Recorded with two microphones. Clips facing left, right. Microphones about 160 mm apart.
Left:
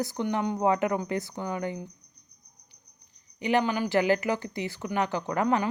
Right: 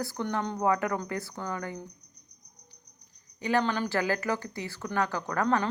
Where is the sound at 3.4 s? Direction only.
20° left (ahead or behind).